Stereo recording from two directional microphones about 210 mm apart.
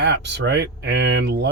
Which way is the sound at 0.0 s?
55° right (ahead or behind).